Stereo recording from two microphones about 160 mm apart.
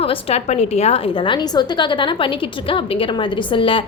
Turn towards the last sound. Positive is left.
turn(degrees=35)  # may be behind; listen again after turning